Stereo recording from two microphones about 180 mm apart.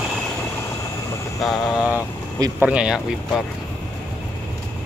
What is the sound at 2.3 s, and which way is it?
Speech, 20° right (ahead or behind).